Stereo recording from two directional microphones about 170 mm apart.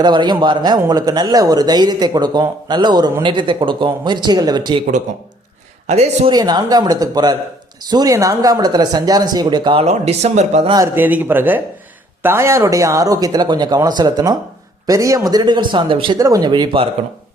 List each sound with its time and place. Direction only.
0.0 s speech: 25° right (ahead or behind)
5.9 s speech: 40° right (ahead or behind)
6.3 s speech: 25° right (ahead or behind)
9.8 s speech: 40° right (ahead or behind)
10.9 s speech: 10° right (ahead or behind); by 16.9 s 30° right (ahead or behind)